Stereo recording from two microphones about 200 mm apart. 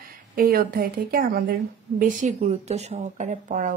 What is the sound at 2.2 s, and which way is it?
Speech, 35° right (ahead or behind).